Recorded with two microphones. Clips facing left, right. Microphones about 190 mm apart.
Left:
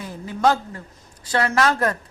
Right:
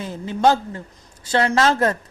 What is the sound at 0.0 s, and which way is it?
A woman's voice, 25° right (ahead or behind).